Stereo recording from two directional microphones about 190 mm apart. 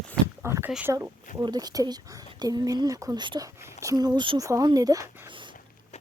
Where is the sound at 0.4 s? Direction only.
15° right (ahead or behind).